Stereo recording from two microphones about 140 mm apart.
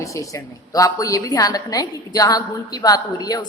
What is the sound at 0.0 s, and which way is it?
A woman's voice, 20° left (ahead or behind).